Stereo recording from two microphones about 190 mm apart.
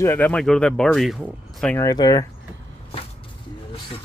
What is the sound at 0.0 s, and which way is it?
Speech, 10° left (ahead or behind).